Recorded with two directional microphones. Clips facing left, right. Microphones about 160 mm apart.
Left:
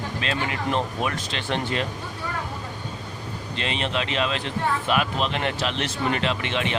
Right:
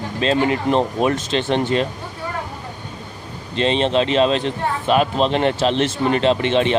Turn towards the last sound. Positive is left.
turn(degrees=-30)  # may be behind; listen again after turning